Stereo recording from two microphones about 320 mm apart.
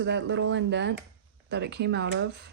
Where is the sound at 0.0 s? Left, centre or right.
Right.